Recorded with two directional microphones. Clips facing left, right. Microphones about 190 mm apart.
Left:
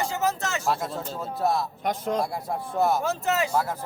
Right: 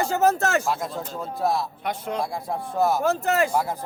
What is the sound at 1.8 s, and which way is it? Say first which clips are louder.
Speech: left 2 dB; 40° left (ahead or behind).